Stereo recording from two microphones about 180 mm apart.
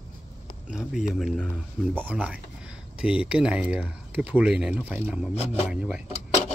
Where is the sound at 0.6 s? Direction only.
5° right (ahead or behind).